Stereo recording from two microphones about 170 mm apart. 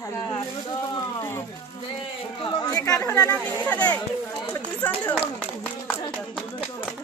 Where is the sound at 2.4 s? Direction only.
25° left (ahead or behind); by 5.2 s 10° left (ahead or behind).